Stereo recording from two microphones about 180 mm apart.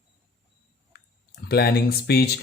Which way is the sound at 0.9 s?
60° left (ahead or behind).